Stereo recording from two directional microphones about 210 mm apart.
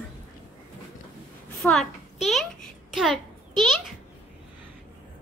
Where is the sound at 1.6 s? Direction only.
Centre (ahead or behind).